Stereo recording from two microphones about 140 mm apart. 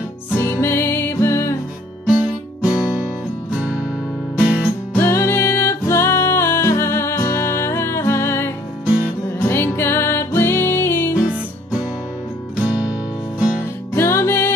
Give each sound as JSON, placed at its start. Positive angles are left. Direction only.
{"t": 0.3, "sound": "music", "side_deg": 15}
{"t": 2.0, "sound": "music", "side_deg": -10}
{"t": 4.4, "sound": "music", "side_deg": -5}
{"t": 4.9, "sound": "music", "side_deg": 20}
{"t": 9.5, "sound": "music", "side_deg": 15}
{"t": 13.9, "sound": "music", "side_deg": 20}